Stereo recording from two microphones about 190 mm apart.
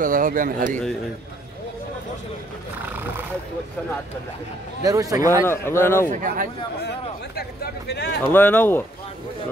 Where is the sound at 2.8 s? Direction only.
10° right (ahead or behind).